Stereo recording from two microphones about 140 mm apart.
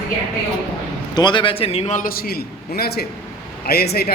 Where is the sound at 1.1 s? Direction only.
35° left (ahead or behind).